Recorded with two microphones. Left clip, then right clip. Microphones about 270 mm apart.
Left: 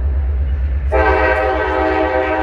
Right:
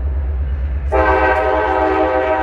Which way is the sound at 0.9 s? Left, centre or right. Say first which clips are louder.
Even; centre.